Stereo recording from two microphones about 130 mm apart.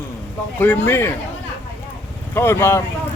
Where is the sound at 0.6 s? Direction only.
15° left (ahead or behind).